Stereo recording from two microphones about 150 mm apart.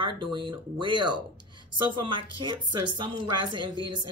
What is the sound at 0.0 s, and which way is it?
A man's voice, 35° right (ahead or behind).